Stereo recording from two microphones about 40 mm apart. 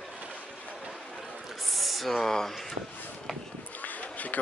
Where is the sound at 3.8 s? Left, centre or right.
Left.